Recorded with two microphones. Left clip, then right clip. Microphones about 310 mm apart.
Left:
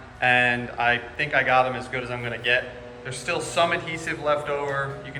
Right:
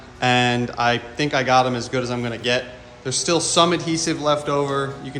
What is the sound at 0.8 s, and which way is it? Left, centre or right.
A man's voice, right.